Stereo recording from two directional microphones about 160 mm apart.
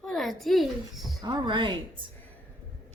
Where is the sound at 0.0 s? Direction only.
Centre (ahead or behind).